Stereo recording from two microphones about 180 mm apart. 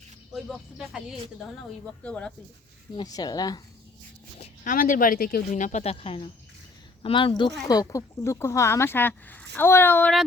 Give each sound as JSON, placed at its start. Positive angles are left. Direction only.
{"t": 0.3, "sound": "speech", "side_deg": 0}
{"t": 2.9, "sound": "speech", "side_deg": 20}
{"t": 4.4, "sound": "speech", "side_deg": 45}